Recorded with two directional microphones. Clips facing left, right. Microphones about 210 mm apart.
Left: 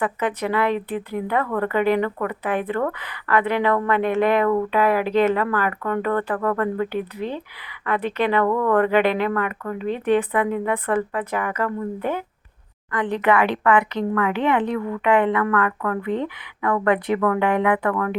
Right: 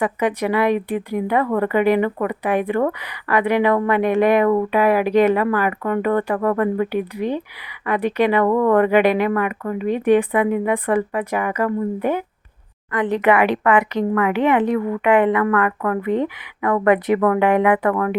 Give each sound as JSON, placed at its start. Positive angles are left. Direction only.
{"t": 0.0, "sound": "speech", "side_deg": -15}